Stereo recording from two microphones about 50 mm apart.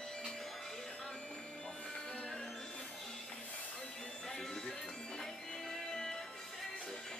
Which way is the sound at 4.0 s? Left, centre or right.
Centre.